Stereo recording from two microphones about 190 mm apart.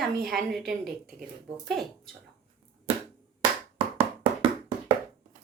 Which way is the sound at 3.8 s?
30° right (ahead or behind).